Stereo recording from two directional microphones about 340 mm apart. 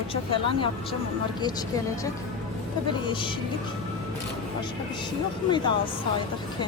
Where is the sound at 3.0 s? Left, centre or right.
Centre.